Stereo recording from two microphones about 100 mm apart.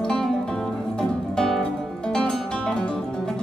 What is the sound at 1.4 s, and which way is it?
Music, 5° left (ahead or behind).